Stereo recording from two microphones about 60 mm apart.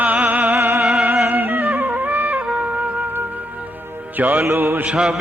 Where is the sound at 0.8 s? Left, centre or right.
Centre.